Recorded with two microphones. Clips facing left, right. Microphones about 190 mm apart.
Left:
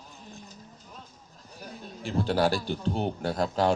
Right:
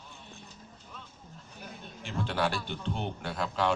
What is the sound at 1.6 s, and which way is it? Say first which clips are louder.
A man's voice: left 6 dB; 35° left (ahead or behind).